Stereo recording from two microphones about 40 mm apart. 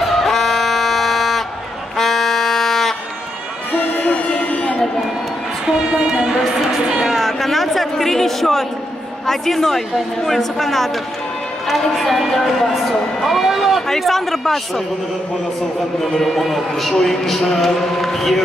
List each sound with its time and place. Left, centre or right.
0.0 s a sound: centre
2.0 s music: centre
4.0 s music: left
5.7 s a sound: centre
7.1 s music: centre
9.2 s a man's voice: centre
12.0 s speech: centre
16.2 s speech: centre